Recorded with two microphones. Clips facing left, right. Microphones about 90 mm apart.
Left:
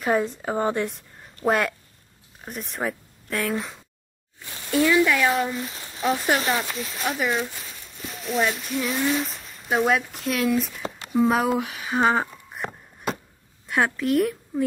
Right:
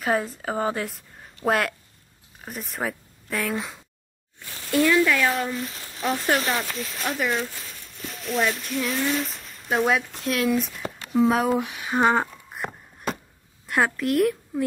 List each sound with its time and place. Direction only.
0.0 s a woman's voice: centre (ahead or behind)
4.5 s sizzle: 15° left (ahead or behind)
4.8 s speech: 10° left (ahead or behind)
5.6 s speech: 35° left (ahead or behind)
5.9 s a woman's voice: centre (ahead or behind)